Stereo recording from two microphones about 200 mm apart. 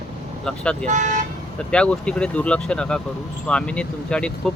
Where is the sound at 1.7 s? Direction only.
5° left (ahead or behind).